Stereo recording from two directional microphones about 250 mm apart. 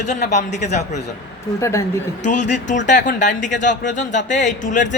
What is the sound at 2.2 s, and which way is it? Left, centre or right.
A man's voice, left.